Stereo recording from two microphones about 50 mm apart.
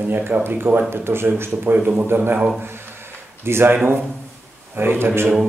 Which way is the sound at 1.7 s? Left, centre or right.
Right.